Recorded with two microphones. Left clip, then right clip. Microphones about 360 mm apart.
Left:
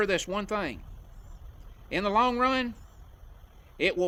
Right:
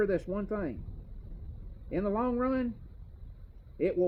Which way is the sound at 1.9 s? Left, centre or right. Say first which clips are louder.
Left 6 dB; left.